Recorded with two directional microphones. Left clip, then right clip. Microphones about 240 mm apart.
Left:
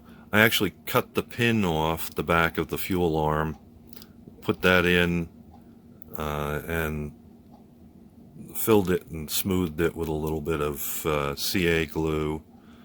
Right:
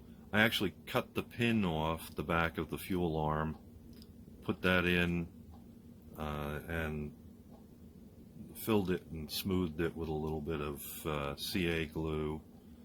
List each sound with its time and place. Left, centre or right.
0.3 s a man's voice: left
8.6 s a man's voice: left